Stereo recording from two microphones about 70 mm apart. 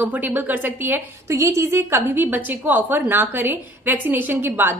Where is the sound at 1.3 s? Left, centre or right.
Right.